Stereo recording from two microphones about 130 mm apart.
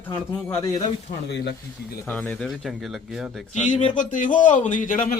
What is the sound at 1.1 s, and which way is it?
Speech, 60° left (ahead or behind).